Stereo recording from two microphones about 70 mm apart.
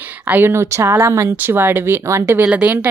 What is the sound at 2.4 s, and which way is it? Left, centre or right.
Speech, centre.